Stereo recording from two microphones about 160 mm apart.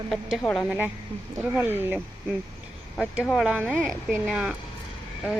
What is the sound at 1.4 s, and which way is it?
Speech, 15° right (ahead or behind).